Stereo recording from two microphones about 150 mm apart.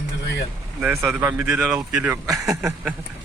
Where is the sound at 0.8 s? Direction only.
15° right (ahead or behind).